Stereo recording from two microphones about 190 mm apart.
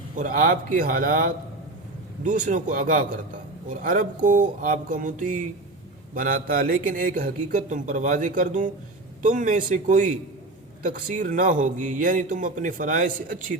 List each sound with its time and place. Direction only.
0.2 s a man's voice: 45° right (ahead or behind)